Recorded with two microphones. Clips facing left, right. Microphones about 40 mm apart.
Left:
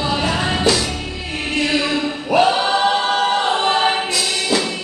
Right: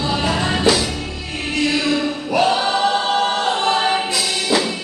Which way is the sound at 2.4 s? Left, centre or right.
Left.